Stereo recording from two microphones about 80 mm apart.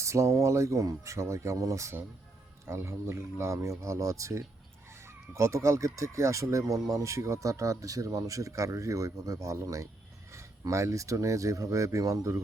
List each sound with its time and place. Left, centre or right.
0.0 s speech: right